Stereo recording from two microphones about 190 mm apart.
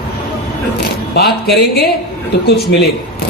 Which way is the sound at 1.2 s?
55° left (ahead or behind).